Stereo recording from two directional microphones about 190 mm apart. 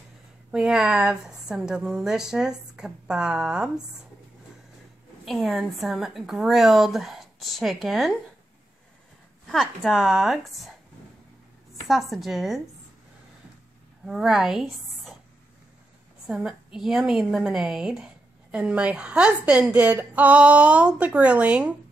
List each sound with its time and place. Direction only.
0.5 s a woman's voice: 5° right (ahead or behind)
5.2 s a woman's voice: centre (ahead or behind)
9.5 s a woman's voice: centre (ahead or behind)
11.9 s a woman's voice: centre (ahead or behind)
14.0 s a woman's voice: centre (ahead or behind)
16.3 s a woman's voice: 5° right (ahead or behind)